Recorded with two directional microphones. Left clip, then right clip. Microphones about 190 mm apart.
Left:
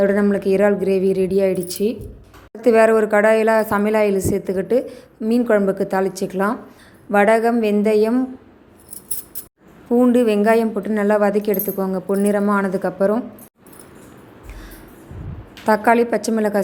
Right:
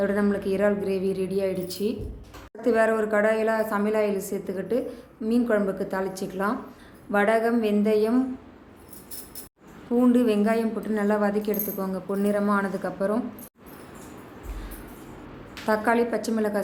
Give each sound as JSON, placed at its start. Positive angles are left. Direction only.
{"t": 0.0, "sound": "a woman's voice", "side_deg": 35}
{"t": 9.9, "sound": "a woman's voice", "side_deg": 35}
{"t": 15.6, "sound": "a woman's voice", "side_deg": 35}